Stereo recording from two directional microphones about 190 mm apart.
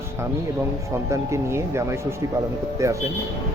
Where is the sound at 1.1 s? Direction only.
15° right (ahead or behind).